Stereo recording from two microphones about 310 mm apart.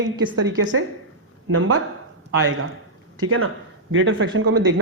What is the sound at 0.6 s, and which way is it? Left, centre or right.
A man's voice, right.